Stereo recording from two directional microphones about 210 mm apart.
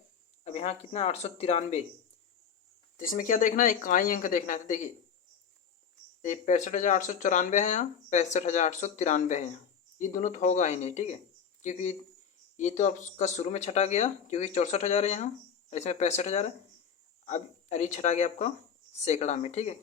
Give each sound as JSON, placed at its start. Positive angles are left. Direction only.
{"t": 0.4, "sound": "speech", "side_deg": 30}
{"t": 3.0, "sound": "speech", "side_deg": 40}
{"t": 6.2, "sound": "speech", "side_deg": 35}